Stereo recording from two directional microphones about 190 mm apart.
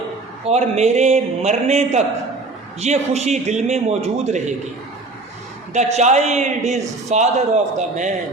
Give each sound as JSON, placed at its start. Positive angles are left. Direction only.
{"t": 0.4, "sound": "a man's voice", "side_deg": -35}
{"t": 5.7, "sound": "a man's voice", "side_deg": -35}